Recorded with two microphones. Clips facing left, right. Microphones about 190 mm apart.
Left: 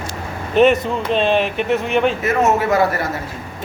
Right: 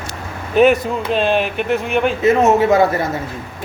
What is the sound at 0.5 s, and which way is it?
Speech, centre (ahead or behind).